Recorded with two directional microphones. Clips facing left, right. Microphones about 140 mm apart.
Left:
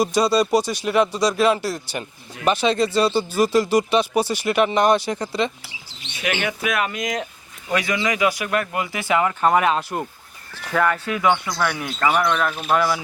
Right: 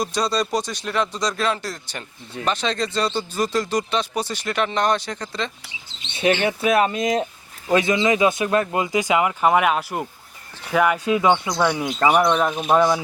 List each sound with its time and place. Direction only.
0.0 s speech: 10° left (ahead or behind)
6.0 s bird: 30° right (ahead or behind)
6.4 s speech: 30° right (ahead or behind)